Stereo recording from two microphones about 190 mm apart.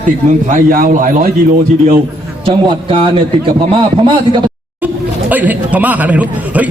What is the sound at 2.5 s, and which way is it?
Speech, 25° right (ahead or behind).